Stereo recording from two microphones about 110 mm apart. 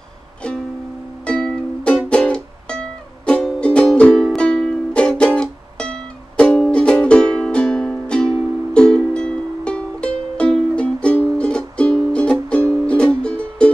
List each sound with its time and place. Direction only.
1.2 s music: 10° left (ahead or behind)